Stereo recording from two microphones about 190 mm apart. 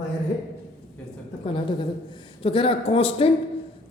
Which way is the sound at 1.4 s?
25° left (ahead or behind).